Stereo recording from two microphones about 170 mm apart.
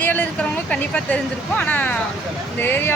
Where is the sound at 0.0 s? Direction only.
10° left (ahead or behind).